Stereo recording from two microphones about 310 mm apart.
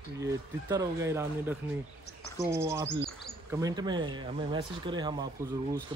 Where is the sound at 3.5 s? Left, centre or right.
Centre.